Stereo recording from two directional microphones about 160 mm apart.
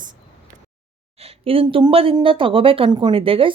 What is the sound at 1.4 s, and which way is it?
Speech, 35° right (ahead or behind).